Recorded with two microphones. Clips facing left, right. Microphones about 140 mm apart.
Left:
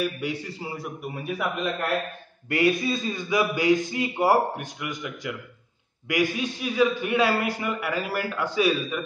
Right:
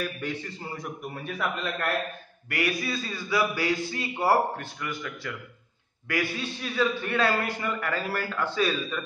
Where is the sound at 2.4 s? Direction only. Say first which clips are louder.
Left 6 dB; 25° left (ahead or behind).